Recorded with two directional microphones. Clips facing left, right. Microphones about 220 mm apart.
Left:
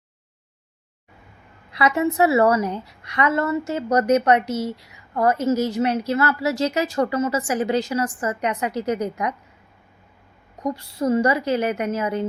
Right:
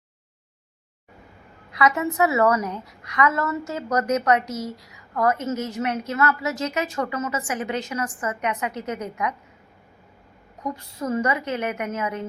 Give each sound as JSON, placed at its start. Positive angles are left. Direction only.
{"t": 1.7, "sound": "a woman's voice", "side_deg": 30}
{"t": 10.6, "sound": "a woman's voice", "side_deg": 35}